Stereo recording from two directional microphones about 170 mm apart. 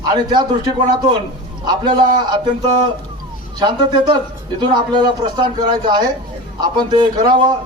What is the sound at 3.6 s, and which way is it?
A man's voice, 25° right (ahead or behind).